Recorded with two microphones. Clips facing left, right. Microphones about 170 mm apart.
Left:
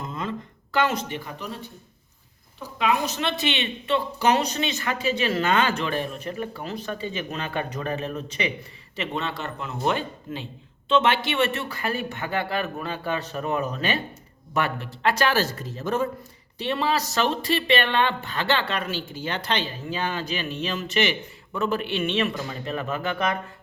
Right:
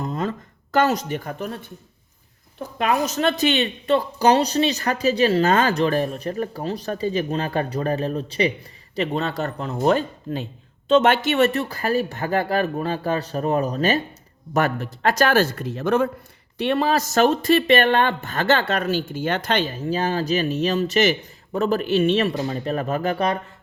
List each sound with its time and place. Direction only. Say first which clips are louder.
0.0 s a sound: right 5 dB; 40° right (ahead or behind)
2.6 s a woman's voice: right 3 dB; 50° right (ahead or behind)
16.6 s a woman's voice: right 5 dB; 55° right (ahead or behind); by 23.4 s 35° right (ahead or behind)